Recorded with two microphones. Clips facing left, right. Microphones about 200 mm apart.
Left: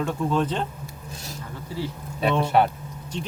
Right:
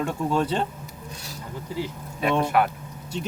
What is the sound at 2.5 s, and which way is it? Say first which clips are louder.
Speech: left 2 dB; 30° left (ahead or behind).